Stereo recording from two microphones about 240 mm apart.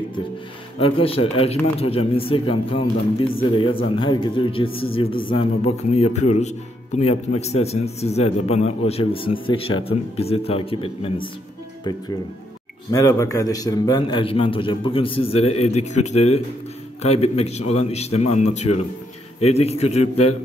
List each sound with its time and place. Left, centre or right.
0.7 s a man's voice: left
12.9 s a man's voice: centre